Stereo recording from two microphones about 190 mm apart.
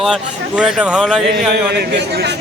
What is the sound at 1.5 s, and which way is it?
Speech, 60° right (ahead or behind).